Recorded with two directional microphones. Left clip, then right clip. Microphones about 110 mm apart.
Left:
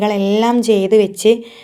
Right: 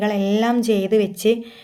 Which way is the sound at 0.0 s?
35° left (ahead or behind).